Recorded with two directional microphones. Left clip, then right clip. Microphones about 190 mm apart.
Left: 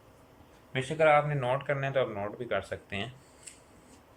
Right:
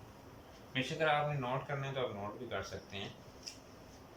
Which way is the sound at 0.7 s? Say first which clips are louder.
Left 9 dB; 40° left (ahead or behind).